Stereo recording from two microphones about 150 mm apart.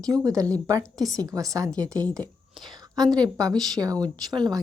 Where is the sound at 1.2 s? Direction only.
25° right (ahead or behind).